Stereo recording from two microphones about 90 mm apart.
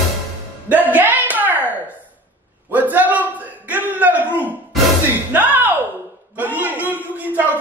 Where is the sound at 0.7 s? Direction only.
20° right (ahead or behind).